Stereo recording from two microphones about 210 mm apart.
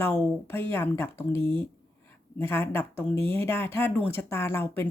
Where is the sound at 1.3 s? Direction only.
25° right (ahead or behind).